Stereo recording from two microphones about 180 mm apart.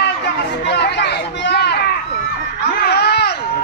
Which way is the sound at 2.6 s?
70° left (ahead or behind).